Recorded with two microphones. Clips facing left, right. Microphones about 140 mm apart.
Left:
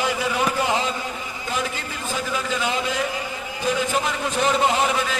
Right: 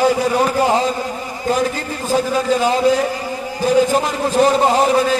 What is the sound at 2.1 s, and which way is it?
A man's voice, 40° right (ahead or behind).